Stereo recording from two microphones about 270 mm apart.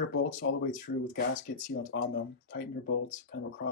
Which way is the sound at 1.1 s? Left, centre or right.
Left.